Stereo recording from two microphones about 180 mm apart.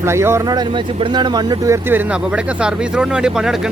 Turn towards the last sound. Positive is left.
turn(degrees=-5)  # may be behind; listen again after turning